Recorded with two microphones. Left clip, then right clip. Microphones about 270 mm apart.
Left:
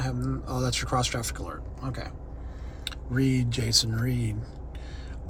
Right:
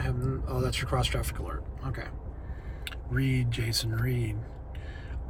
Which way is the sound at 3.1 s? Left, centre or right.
Centre.